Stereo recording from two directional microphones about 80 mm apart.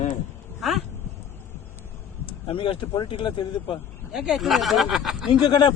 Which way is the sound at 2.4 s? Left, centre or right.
Left.